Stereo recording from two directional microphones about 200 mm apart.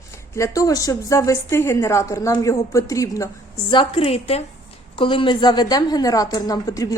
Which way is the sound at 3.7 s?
25° left (ahead or behind).